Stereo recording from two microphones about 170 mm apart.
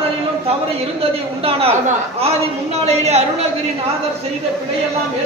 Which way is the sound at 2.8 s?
40° right (ahead or behind).